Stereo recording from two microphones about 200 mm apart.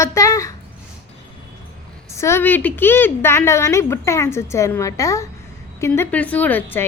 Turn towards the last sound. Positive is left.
turn(degrees=10)  # may be behind; listen again after turning